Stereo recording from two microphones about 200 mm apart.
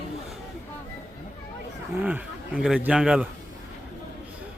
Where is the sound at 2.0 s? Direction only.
5° right (ahead or behind).